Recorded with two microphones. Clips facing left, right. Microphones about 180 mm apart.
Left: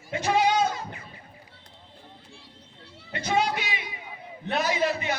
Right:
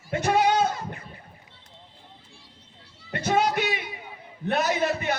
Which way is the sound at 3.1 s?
50° right (ahead or behind).